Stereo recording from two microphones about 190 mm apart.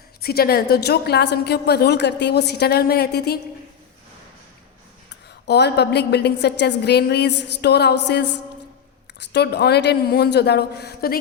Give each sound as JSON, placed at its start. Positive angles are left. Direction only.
{"t": 0.2, "sound": "a woman's voice", "side_deg": 55}
{"t": 5.5, "sound": "a woman's voice", "side_deg": 60}
{"t": 9.3, "sound": "a woman's voice", "side_deg": 60}